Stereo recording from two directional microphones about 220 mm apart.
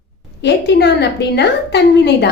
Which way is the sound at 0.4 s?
50° left (ahead or behind).